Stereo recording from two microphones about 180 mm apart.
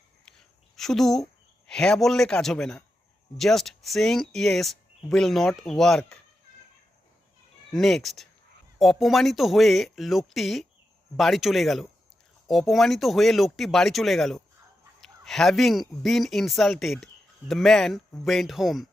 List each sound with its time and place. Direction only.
0.3 s speech: centre (ahead or behind)
7.7 s speech: centre (ahead or behind)